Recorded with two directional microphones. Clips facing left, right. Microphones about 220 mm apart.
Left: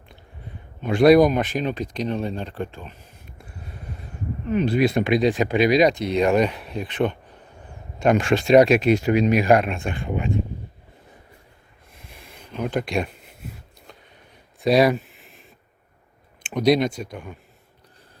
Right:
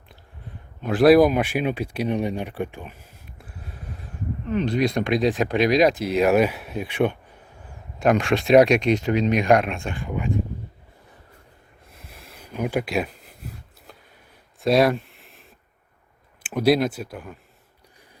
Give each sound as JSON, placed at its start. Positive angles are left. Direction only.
{"t": 0.8, "sound": "speech", "side_deg": -5}
{"t": 9.8, "sound": "speech", "side_deg": 25}
{"t": 11.9, "sound": "a sound", "side_deg": -5}
{"t": 16.4, "sound": "speech", "side_deg": -5}